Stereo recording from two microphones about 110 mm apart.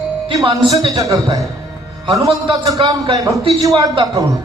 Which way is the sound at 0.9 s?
35° right (ahead or behind).